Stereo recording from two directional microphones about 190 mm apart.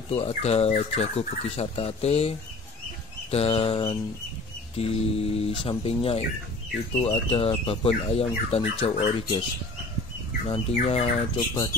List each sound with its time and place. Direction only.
0.1 s speech: 35° left (ahead or behind)
10.5 s speech: 30° left (ahead or behind)